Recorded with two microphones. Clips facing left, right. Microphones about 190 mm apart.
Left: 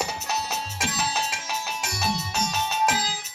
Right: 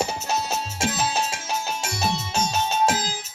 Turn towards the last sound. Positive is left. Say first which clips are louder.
# right 2 dB
turn(degrees=-45)  # may be behind; listen again after turning